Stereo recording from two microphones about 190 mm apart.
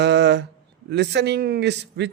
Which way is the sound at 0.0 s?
65° right (ahead or behind).